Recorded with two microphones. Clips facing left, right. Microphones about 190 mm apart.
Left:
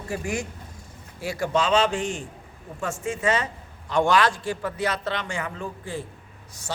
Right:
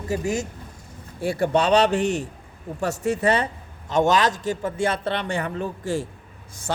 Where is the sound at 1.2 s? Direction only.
55° right (ahead or behind).